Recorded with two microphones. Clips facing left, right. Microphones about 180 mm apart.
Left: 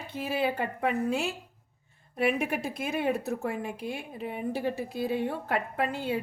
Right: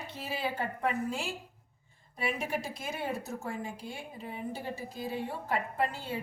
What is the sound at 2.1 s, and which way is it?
A woman's voice, 60° left (ahead or behind).